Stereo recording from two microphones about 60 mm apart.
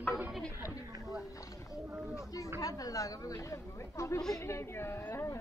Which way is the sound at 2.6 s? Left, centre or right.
Left.